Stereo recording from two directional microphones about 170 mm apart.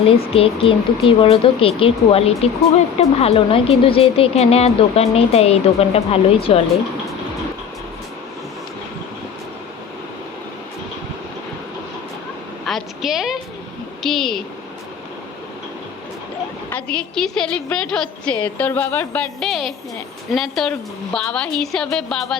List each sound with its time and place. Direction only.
0.0 s a woman's voice: 35° left (ahead or behind)
12.6 s a sound: centre (ahead or behind)
14.0 s a woman's voice: centre (ahead or behind)
16.6 s a woman's voice: 10° left (ahead or behind)